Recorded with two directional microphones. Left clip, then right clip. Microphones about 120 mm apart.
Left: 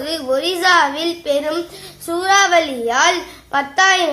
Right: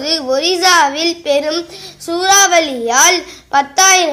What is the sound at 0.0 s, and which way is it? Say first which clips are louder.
A woman's voice: right 4 dB; 25° right (ahead or behind).